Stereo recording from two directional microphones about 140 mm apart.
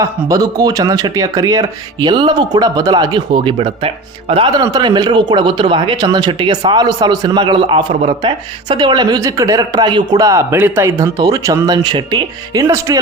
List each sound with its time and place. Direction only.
0.0 s speech: 25° right (ahead or behind); by 4.6 s 40° right (ahead or behind)
4.6 s speech: 30° right (ahead or behind)
12.6 s speech: 20° right (ahead or behind)